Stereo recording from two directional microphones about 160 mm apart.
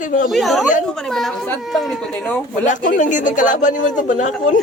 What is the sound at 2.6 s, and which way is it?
Speech, 55° left (ahead or behind).